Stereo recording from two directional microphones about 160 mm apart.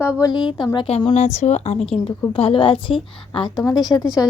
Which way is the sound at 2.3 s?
35° left (ahead or behind).